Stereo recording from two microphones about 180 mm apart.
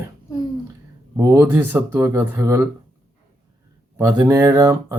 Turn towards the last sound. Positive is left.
turn(degrees=-15)  # may be behind; listen again after turning